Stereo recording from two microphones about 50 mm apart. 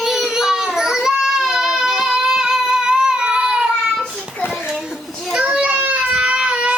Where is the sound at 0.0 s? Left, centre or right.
Centre.